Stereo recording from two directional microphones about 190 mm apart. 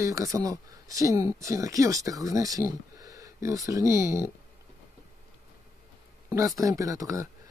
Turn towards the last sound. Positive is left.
turn(degrees=-15)  # may be behind; listen again after turning